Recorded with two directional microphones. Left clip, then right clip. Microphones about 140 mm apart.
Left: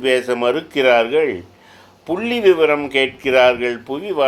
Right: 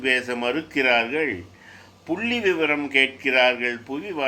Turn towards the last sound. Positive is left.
turn(degrees=40)  # may be behind; listen again after turning